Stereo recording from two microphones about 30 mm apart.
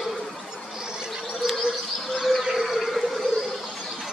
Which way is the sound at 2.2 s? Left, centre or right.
Centre.